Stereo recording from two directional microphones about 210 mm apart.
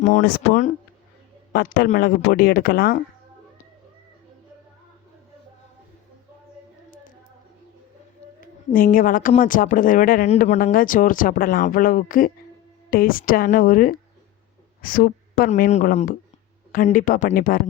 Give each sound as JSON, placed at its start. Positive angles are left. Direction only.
{"t": 0.0, "sound": "speech", "side_deg": 40}
{"t": 1.5, "sound": "speech", "side_deg": 45}
{"t": 8.4, "sound": "speech", "side_deg": 40}